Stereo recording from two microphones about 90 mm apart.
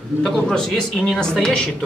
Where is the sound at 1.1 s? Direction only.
5° left (ahead or behind).